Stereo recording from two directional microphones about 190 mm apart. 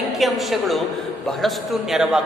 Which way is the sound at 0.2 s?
Centre (ahead or behind).